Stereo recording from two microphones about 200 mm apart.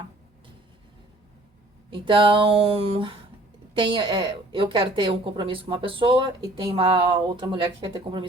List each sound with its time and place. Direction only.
1.9 s a woman's voice: 25° right (ahead or behind)